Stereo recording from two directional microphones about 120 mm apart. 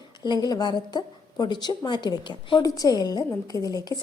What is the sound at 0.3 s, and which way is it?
A woman's voice, 35° left (ahead or behind).